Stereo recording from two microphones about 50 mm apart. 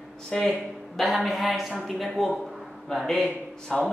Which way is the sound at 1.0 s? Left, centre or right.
Centre.